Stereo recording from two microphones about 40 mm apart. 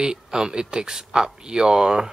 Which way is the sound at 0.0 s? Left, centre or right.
Centre.